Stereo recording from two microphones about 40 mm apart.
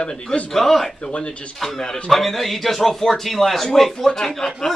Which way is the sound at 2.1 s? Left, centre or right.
Centre.